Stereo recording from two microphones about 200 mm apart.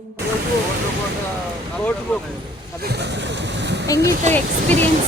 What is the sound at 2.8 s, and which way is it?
Vehicle, 55° right (ahead or behind).